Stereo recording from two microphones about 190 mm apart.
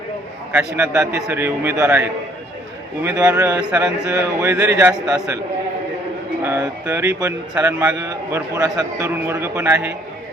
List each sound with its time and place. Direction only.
0.5 s a man's voice: 5° right (ahead or behind)
3.7 s speech: 5° right (ahead or behind)
4.1 s a man's voice: 15° right (ahead or behind)
6.4 s a man's voice: 10° right (ahead or behind)